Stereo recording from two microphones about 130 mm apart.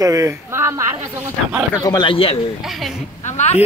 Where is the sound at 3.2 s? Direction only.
60° left (ahead or behind).